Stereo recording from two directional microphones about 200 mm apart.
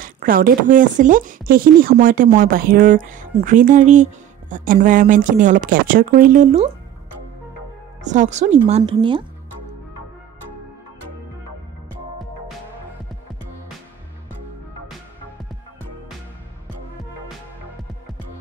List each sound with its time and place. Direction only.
0.0 s speech: 45° right (ahead or behind)
8.0 s speech: 35° right (ahead or behind)